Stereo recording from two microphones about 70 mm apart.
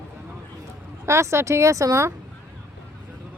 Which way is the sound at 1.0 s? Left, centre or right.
Right.